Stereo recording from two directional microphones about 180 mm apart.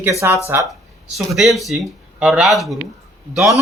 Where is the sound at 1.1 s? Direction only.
Centre (ahead or behind).